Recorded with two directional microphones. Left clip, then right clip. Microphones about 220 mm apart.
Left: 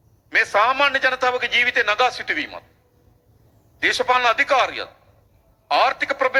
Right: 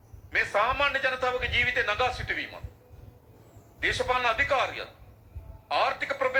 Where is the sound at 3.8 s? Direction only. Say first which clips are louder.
Left 8 dB; 30° left (ahead or behind).